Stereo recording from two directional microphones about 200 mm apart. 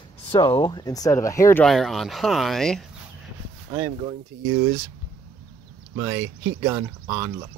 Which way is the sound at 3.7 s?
15° right (ahead or behind).